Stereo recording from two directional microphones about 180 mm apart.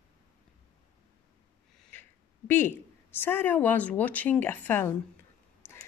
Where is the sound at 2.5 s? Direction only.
10° left (ahead or behind).